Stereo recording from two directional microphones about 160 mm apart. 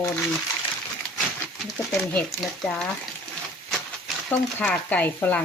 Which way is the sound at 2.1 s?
10° left (ahead or behind).